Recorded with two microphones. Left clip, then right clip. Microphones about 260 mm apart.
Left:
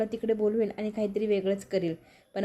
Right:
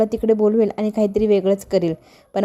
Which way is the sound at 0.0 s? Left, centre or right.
Right.